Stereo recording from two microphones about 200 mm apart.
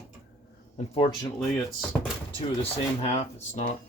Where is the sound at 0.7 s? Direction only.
30° left (ahead or behind).